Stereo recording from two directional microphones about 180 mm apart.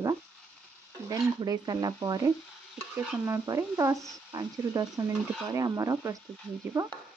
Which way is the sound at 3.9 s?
Centre (ahead or behind).